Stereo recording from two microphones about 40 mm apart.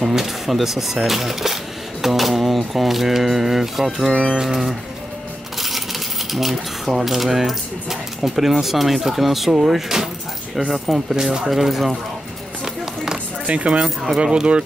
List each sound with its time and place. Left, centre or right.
0.2 s speech: centre
5.6 s speech: centre
11.1 s speech: centre
11.5 s speech: centre
13.5 s speech: right
13.8 s speech: centre
14.2 s speech: right